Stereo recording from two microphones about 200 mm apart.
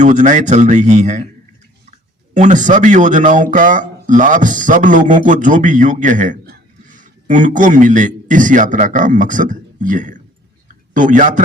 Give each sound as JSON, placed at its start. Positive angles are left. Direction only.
{"t": 0.0, "sound": "speech", "side_deg": -35}
{"t": 2.3, "sound": "a man's voice", "side_deg": -40}